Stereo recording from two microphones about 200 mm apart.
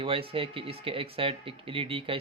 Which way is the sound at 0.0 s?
25° right (ahead or behind).